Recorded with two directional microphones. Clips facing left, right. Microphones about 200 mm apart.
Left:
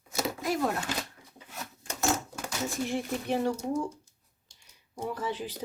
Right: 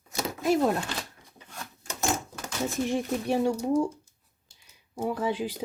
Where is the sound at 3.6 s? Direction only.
30° right (ahead or behind).